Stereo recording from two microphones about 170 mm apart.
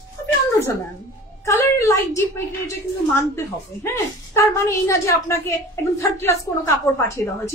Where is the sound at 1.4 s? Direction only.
15° left (ahead or behind).